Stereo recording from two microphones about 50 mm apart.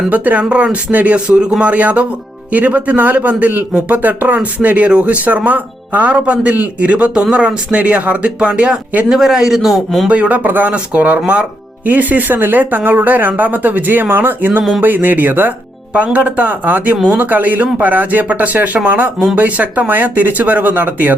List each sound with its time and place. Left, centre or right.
0.1 s speech: right
9.0 s a man's voice: centre
10.1 s speech: right
15.9 s speech: right